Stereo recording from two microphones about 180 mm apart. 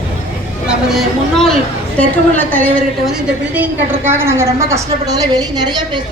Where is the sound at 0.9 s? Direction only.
Centre (ahead or behind).